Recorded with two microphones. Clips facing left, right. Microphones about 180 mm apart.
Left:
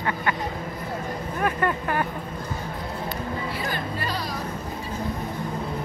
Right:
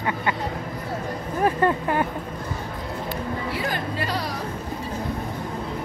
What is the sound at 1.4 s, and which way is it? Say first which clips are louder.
Speech: right 5 dB; 30° right (ahead or behind).